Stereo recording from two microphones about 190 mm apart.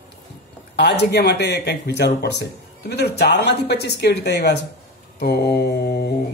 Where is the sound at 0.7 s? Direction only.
65° left (ahead or behind).